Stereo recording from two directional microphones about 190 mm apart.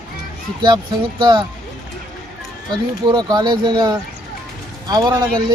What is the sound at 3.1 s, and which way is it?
Speech, 20° right (ahead or behind).